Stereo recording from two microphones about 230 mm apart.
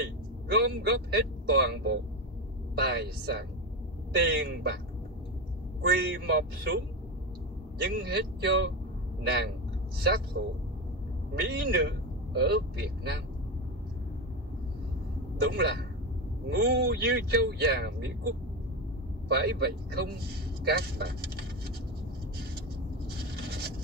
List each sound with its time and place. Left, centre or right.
0.0 s speech: right
5.8 s speech: right
7.8 s speech: right
10.4 s speech: right
15.4 s speech: right
23.1 s a sound: right